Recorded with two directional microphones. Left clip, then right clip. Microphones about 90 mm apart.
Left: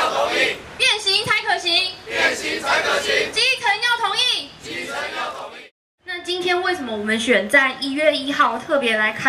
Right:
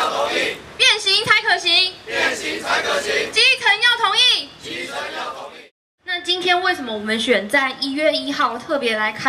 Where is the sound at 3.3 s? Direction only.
45° right (ahead or behind).